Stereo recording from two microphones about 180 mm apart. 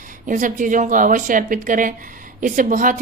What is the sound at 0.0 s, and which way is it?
Speech, 45° right (ahead or behind).